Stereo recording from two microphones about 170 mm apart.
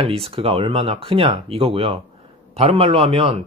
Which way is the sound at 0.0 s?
35° right (ahead or behind).